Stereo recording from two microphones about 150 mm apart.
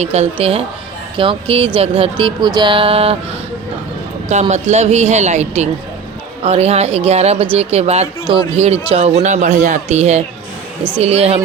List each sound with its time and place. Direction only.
0.0 s speech: 45° right (ahead or behind)
4.3 s speech: 50° right (ahead or behind)